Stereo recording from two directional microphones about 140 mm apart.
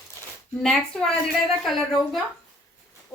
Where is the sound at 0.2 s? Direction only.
20° left (ahead or behind).